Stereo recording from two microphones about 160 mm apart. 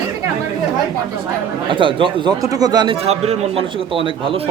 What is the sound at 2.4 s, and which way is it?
Speech, 20° right (ahead or behind).